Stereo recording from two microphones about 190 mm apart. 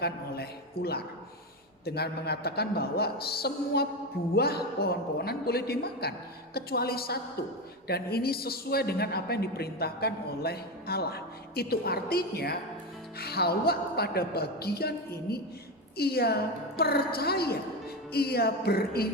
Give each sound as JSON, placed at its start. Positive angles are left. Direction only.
{"t": 0.0, "sound": "a man's voice", "side_deg": 55}